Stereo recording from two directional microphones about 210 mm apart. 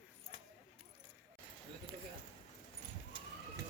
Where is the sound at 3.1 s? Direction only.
25° right (ahead or behind).